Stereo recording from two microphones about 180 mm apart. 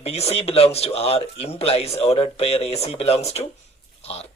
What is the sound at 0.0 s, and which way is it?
Speech, 35° left (ahead or behind).